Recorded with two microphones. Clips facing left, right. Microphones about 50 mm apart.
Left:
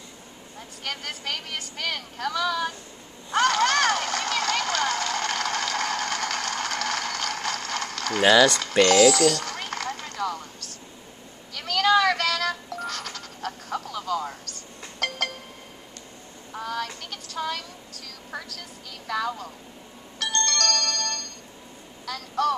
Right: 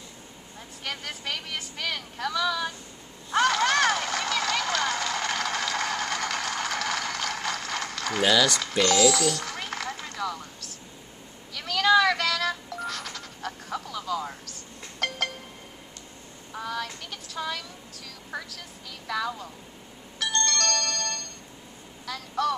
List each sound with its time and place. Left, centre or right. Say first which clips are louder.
0.8 s speech: left 1 dB; centre
3.3 s a sound: left 1 dB; centre
8.2 s speech: left 5 dB; centre
8.8 s speech: left 5 dB; left
9.4 s a sound: left 2 dB; centre
11.5 s music: even; centre
16.5 s speech: left 2 dB; centre
20.2 s ringtone: left 1 dB; centre
22.0 s speech: left 2 dB; centre